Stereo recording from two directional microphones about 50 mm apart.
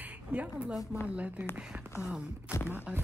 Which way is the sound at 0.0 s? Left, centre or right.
Right.